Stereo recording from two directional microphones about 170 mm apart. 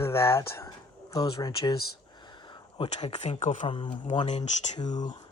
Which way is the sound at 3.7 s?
30° left (ahead or behind).